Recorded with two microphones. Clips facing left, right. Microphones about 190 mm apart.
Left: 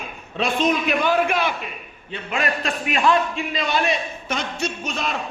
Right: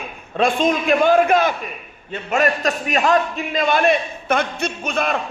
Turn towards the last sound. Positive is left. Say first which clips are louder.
# right 4 dB
turn(degrees=-55)  # may be behind; listen again after turning